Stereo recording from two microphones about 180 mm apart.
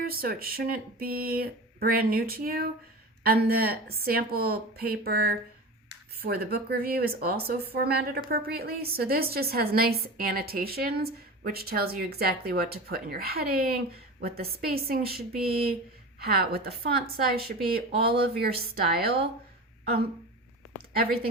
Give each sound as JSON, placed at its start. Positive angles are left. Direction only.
{"t": 0.0, "sound": "speech", "side_deg": -55}
{"t": 16.2, "sound": "speech", "side_deg": -60}